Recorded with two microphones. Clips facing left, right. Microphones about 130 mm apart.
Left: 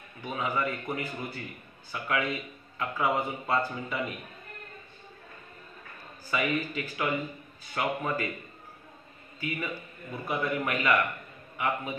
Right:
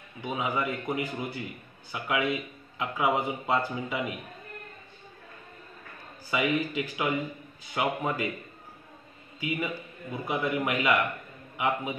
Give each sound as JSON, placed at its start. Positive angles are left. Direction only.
{"t": 0.2, "sound": "speech", "side_deg": -15}
{"t": 6.3, "sound": "speech", "side_deg": -15}
{"t": 9.4, "sound": "a man's voice", "side_deg": -15}